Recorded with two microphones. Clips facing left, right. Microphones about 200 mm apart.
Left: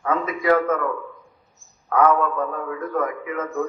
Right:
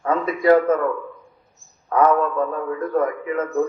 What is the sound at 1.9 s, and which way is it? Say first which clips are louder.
A man's voice: right 1 dB; 35° right (ahead or behind).